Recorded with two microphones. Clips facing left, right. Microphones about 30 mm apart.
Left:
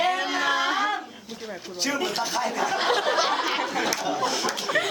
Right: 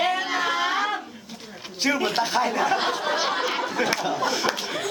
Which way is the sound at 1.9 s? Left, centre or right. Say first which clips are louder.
Right 4 dB; right.